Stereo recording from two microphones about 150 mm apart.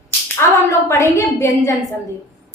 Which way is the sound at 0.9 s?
20° left (ahead or behind).